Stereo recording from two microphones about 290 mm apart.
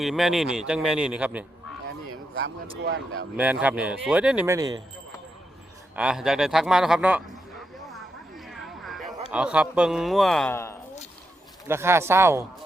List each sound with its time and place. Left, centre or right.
0.0 s a man's voice: centre
2.0 s a sound: right
2.8 s speech: right
3.3 s a man's voice: centre
6.0 s a man's voice: centre
7.8 s a sound: centre
9.3 s a man's voice: centre
11.7 s speech: centre